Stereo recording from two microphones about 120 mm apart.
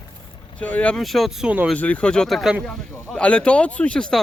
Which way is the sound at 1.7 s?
10° left (ahead or behind).